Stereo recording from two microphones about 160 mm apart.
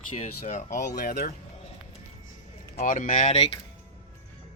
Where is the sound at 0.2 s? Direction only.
50° left (ahead or behind).